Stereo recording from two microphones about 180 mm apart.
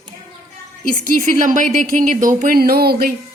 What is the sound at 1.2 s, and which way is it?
Speech, 45° right (ahead or behind).